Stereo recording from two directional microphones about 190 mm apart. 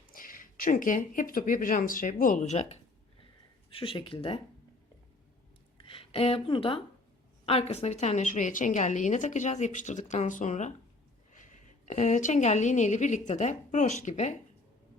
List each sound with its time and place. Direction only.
0.1 s speech: 45° left (ahead or behind); by 4.4 s 30° left (ahead or behind)
5.7 s a woman's voice: 30° left (ahead or behind)